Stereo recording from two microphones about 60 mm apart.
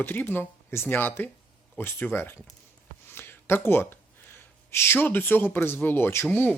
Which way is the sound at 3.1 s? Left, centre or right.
Left.